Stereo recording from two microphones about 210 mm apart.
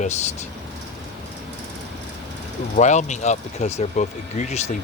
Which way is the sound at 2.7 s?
35° left (ahead or behind).